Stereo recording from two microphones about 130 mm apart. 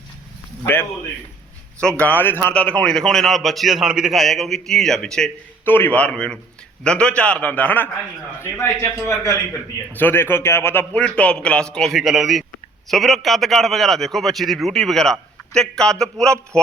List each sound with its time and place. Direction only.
0.6 s a man's voice: 15° left (ahead or behind)
2.0 s a man's voice: 15° left (ahead or behind)
5.6 s a man's voice: 15° left (ahead or behind)